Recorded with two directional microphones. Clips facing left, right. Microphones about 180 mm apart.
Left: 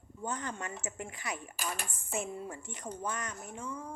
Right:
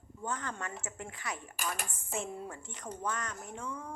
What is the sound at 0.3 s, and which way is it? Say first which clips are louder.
Speech: even; 15° left (ahead or behind).